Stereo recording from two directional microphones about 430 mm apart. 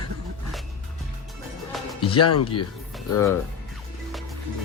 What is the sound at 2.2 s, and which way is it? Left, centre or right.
Speech, left.